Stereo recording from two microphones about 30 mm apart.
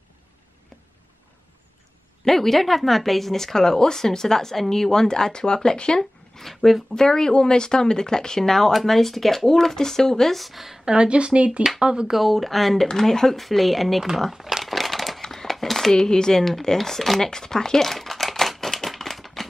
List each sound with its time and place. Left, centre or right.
2.2 s speech: centre; by 5.9 s left
5.9 s zipper: centre
6.5 s speech: centre
7.0 s speech: left
10.3 s speech: centre
10.9 s speech: right
11.8 s speech: right
12.1 s speech: centre
13.4 s speech: centre
14.3 s crumpling: centre
14.6 s crushing: centre
15.5 s speech: centre
17.2 s speech: centre
17.8 s crumpling: centre